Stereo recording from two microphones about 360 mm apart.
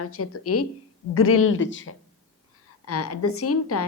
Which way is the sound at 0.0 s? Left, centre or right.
Left.